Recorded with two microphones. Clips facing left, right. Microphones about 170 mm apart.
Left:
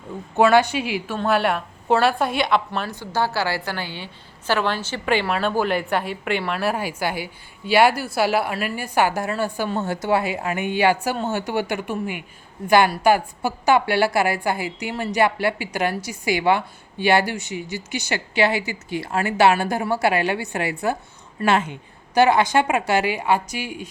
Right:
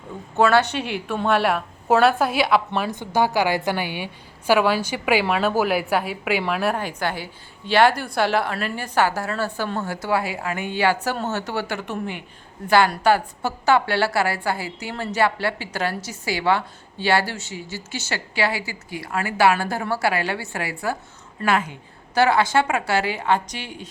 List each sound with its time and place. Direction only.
0.3 s a woman's voice: 15° left (ahead or behind); by 2.9 s 5° right (ahead or behind)
2.9 s a woman's voice: 20° right (ahead or behind); by 23.9 s 10° left (ahead or behind)